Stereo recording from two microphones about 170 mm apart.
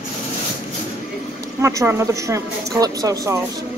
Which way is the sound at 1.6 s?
15° right (ahead or behind).